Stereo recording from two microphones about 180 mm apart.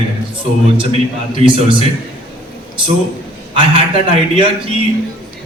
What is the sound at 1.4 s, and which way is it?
Speech, 30° right (ahead or behind).